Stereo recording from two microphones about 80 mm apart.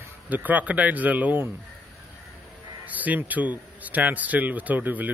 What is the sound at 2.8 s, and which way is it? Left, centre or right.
Speech, right.